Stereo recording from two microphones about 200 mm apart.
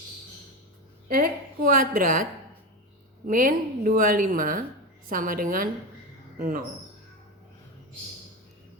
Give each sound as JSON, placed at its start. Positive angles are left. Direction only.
{"t": 1.0, "sound": "speech", "side_deg": -45}
{"t": 3.2, "sound": "speech", "side_deg": -45}